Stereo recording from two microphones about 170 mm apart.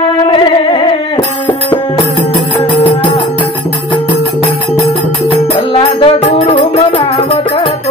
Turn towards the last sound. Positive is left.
turn(degrees=30)  # may be behind; listen again after turning